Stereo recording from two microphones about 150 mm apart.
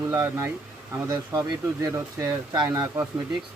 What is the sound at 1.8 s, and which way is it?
Speech, 25° right (ahead or behind).